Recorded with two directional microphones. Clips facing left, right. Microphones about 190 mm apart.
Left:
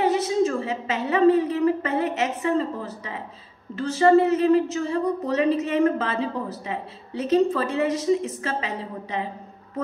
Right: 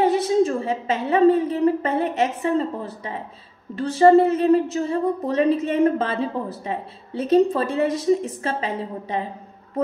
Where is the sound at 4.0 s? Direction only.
35° right (ahead or behind).